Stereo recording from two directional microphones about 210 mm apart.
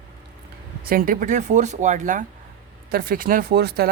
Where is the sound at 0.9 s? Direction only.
40° right (ahead or behind).